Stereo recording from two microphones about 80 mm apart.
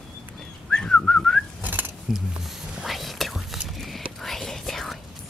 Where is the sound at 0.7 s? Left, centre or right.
Centre.